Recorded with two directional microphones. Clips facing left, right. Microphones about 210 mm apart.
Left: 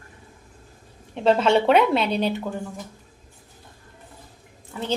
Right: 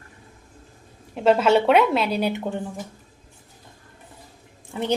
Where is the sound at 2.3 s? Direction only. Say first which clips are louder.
Right 1 dB; 25° right (ahead or behind).